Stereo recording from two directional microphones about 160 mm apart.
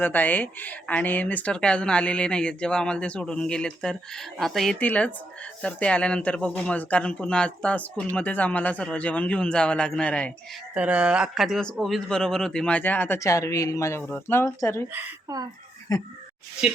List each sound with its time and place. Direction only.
0.0 s speech: 10° left (ahead or behind)
10.8 s speech: 10° right (ahead or behind); by 14.8 s 15° left (ahead or behind)
15.3 s speech: 20° right (ahead or behind)
15.9 s speech: 20° left (ahead or behind)